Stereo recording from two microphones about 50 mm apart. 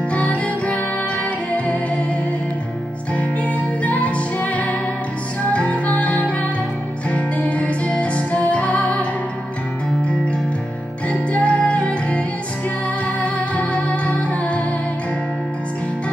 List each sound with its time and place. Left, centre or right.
0.1 s music: left
3.8 s music: left
11.1 s music: left